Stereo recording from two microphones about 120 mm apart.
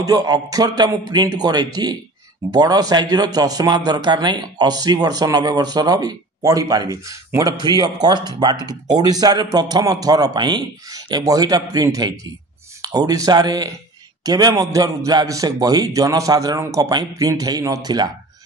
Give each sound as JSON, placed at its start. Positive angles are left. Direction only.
{"t": 0.0, "sound": "speech", "side_deg": -30}